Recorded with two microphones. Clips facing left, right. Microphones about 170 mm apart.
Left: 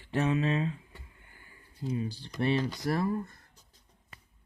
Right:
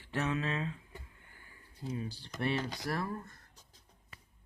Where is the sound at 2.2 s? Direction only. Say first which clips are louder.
Left 5 dB; 20° left (ahead or behind).